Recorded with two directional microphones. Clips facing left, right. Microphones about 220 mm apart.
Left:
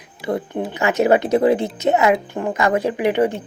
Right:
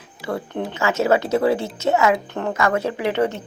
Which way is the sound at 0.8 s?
15° left (ahead or behind).